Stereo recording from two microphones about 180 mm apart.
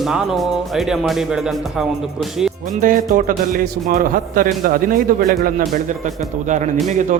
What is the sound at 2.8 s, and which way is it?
A man's voice, 50° right (ahead or behind).